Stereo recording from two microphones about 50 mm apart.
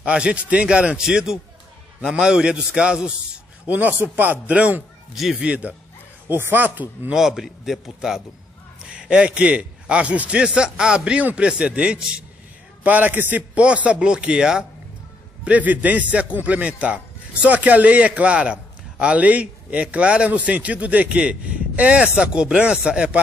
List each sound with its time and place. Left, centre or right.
0.0 s a man's voice: right
3.6 s speech: right
5.1 s speech: centre
5.4 s a man's voice: right
6.2 s speech: right
7.2 s a man's voice: centre; by 10.4 s right
10.4 s a man's voice: centre
12.8 s speech: right
13.6 s a man's voice: right
15.4 s a man's voice: right